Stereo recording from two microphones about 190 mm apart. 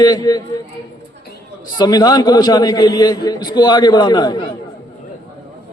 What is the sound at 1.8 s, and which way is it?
A man's voice, 20° left (ahead or behind).